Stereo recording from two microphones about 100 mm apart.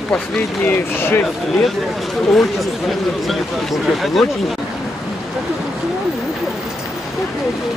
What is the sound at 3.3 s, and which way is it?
Speech, centre (ahead or behind).